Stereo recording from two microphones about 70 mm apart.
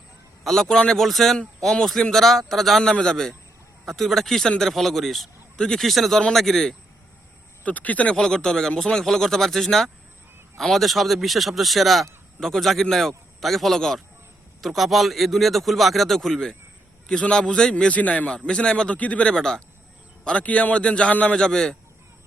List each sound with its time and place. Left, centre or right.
0.4 s a man's voice: centre
7.6 s speech: left
8.1 s a man's voice: centre
18.3 s speech: centre